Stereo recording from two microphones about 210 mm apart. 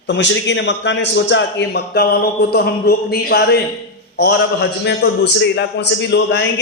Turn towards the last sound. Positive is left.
turn(degrees=55)  # may be behind; listen again after turning